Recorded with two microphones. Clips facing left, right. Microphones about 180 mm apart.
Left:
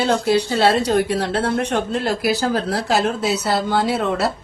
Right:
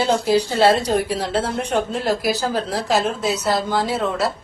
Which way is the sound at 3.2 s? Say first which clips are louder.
Left 1 dB; 70° left (ahead or behind).